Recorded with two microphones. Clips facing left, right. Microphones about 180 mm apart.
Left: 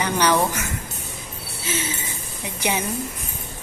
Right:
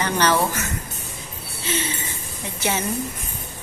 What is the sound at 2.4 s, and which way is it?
Speech, 15° left (ahead or behind).